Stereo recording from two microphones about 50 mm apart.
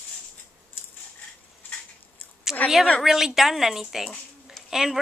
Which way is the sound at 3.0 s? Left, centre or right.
Centre.